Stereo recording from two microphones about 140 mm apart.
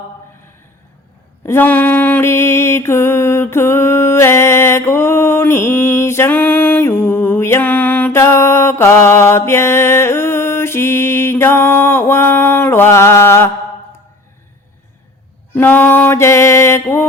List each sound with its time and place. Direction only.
1.5 s mantra: 15° left (ahead or behind)
15.5 s mantra: 15° left (ahead or behind)